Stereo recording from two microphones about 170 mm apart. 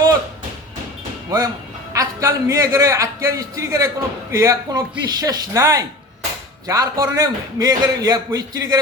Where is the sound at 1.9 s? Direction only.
15° right (ahead or behind).